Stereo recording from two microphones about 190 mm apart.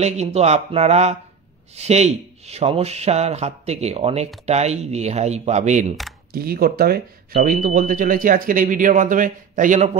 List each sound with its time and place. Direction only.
0.0 s speech: 35° right (ahead or behind)
6.3 s speech: 55° right (ahead or behind)